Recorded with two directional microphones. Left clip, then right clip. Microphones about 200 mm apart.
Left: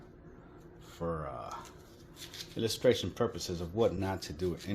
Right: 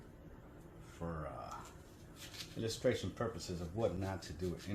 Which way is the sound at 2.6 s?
50° left (ahead or behind).